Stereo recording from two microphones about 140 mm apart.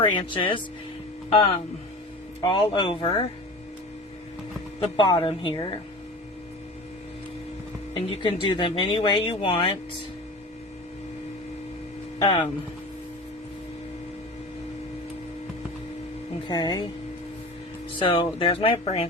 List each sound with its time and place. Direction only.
0.0 s speech: 35° left (ahead or behind)
4.9 s speech: 35° left (ahead or behind)
7.9 s speech: 40° left (ahead or behind)
12.2 s speech: 35° left (ahead or behind)
16.5 s speech: 30° left (ahead or behind)
18.0 s speech: 35° left (ahead or behind)